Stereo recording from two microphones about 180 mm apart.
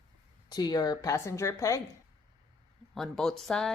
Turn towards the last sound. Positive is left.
turn(degrees=0)  # may be behind; listen again after turning